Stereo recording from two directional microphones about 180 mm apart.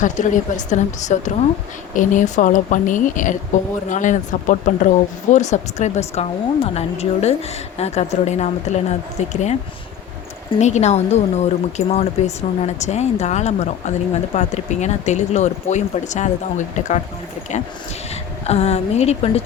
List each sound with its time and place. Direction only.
0.0 s speech: 45° left (ahead or behind)
10.6 s speech: 40° left (ahead or behind)
18.1 s speech: 35° left (ahead or behind)